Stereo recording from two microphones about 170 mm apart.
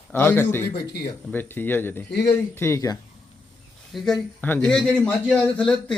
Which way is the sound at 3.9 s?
Centre (ahead or behind).